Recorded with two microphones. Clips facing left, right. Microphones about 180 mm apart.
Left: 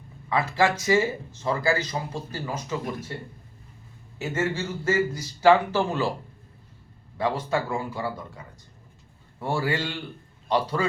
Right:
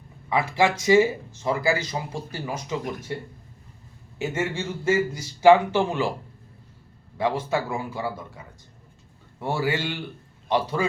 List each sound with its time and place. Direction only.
0.3 s speech: 10° right (ahead or behind)
4.5 s speech: 25° right (ahead or behind)
5.4 s speech: 15° right (ahead or behind)
7.2 s speech: 10° right (ahead or behind)